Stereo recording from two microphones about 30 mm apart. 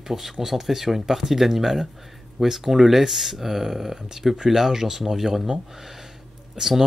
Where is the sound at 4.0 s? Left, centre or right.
Centre.